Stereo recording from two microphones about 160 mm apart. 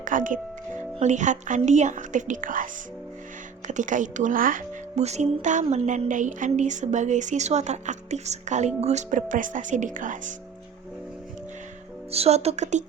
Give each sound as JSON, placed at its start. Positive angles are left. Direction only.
{"t": 0.0, "sound": "speech", "side_deg": -55}
{"t": 3.7, "sound": "speech", "side_deg": -50}
{"t": 4.9, "sound": "speech", "side_deg": -45}
{"t": 12.1, "sound": "speech", "side_deg": -40}